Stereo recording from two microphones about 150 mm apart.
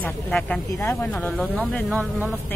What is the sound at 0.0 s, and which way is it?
Speech, 5° left (ahead or behind).